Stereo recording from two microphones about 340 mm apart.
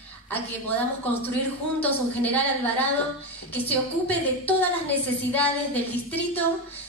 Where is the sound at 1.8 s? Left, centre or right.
Centre.